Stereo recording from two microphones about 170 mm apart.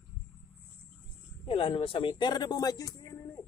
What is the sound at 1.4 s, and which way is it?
Speech, 30° left (ahead or behind).